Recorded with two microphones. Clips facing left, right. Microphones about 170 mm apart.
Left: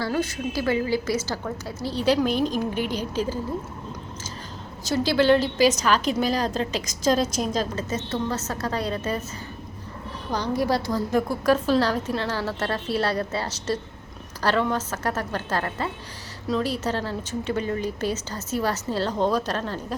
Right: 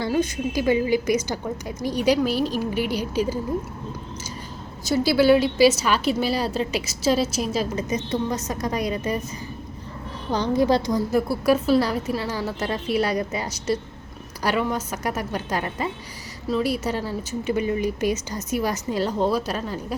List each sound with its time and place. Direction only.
0.0 s a woman's voice: 15° right (ahead or behind)
4.9 s a woman's voice: 10° right (ahead or behind)
10.3 s a woman's voice: 20° right (ahead or behind)
11.1 s a woman's voice: 10° right (ahead or behind)